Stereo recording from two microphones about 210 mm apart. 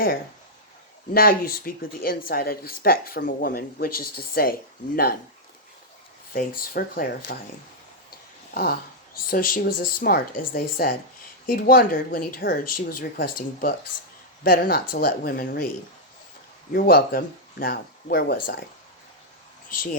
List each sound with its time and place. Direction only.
1.1 s speech: 45° left (ahead or behind)
6.3 s speech: 45° left (ahead or behind)
8.5 s speech: 45° left (ahead or behind)
16.7 s speech: 45° left (ahead or behind)